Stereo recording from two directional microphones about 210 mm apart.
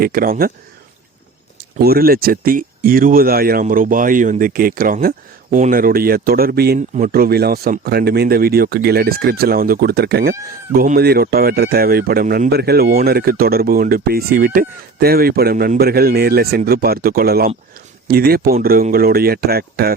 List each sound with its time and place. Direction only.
0.0 s speech: 45° right (ahead or behind)
1.8 s speech: 45° right (ahead or behind)